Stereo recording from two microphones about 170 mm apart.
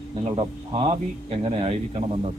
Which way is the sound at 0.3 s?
35° right (ahead or behind).